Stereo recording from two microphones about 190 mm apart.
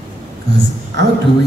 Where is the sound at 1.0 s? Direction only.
65° right (ahead or behind).